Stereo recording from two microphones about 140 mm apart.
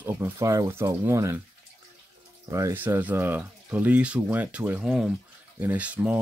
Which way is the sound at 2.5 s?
20° right (ahead or behind).